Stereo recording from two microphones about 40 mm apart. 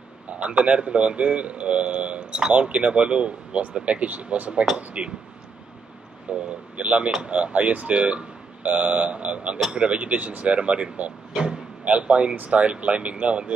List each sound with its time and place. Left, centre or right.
0.3 s a man's voice: right
6.3 s a man's voice: right